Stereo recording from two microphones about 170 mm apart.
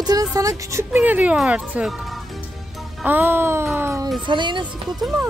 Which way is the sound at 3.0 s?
10° right (ahead or behind).